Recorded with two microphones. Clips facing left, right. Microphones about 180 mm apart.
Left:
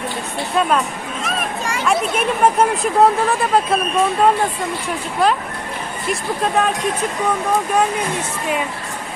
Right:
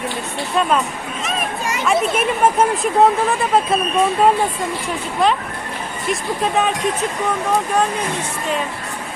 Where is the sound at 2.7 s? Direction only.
Centre (ahead or behind).